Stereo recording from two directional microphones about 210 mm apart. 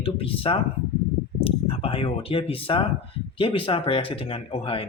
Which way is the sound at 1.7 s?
25° left (ahead or behind).